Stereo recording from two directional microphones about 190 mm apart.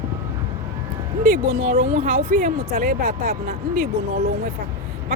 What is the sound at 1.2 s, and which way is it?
Speech, 45° right (ahead or behind).